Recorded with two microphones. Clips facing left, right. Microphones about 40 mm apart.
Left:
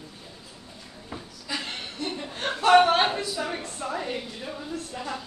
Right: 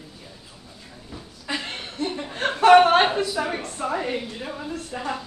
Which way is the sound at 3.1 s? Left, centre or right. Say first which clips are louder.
Right 6 dB; right.